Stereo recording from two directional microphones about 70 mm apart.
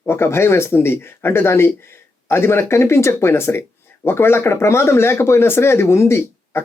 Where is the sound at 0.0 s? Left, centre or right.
Left.